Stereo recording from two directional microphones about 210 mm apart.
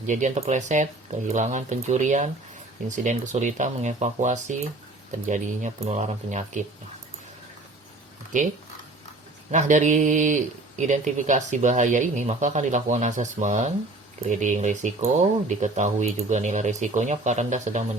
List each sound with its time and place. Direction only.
0.1 s a man's voice: 35° right (ahead or behind)
8.3 s a man's voice: 35° right (ahead or behind)